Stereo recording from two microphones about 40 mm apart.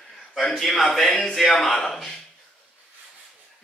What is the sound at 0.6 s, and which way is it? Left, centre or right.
A man's voice, centre.